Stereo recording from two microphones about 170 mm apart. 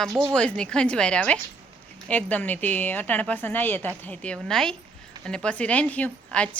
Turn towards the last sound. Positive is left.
turn(degrees=10)  # may be behind; listen again after turning